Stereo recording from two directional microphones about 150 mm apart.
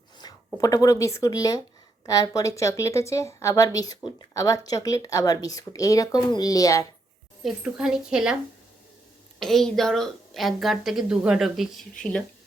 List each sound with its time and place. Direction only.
0.2 s a woman's voice: 25° left (ahead or behind)
7.4 s a woman's voice: 5° right (ahead or behind)
9.4 s a woman's voice: centre (ahead or behind)